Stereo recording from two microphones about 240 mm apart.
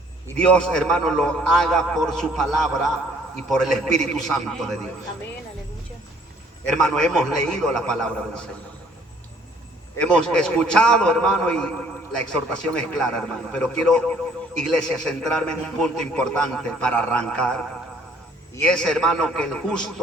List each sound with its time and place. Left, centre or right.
0.3 s a man's voice: centre
6.7 s a man's voice: centre
10.0 s a man's voice: centre